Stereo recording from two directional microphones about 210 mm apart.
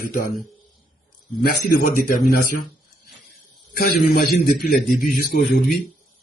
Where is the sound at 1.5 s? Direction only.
40° left (ahead or behind).